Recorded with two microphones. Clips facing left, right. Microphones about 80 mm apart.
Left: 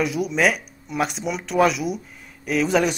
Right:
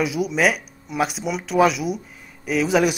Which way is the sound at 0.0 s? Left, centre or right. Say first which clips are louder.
Right 1 dB; centre.